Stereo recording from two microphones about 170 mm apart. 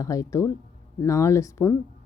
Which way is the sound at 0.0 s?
20° left (ahead or behind).